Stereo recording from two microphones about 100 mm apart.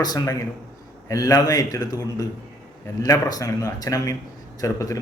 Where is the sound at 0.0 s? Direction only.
40° left (ahead or behind).